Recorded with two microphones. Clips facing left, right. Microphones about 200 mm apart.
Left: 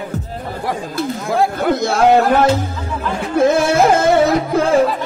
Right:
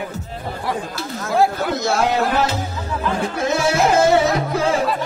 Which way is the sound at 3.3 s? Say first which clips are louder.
Left 9 dB; 55° left (ahead or behind).